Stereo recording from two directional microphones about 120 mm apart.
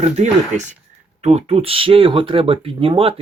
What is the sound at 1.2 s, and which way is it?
Speech, 60° right (ahead or behind).